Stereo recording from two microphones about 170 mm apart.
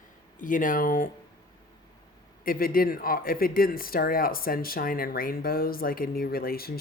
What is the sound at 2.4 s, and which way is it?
Speech, 60° left (ahead or behind).